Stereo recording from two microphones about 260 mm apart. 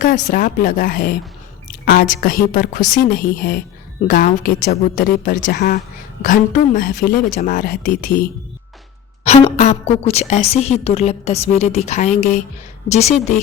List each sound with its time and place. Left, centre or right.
0.0 s a woman's voice: left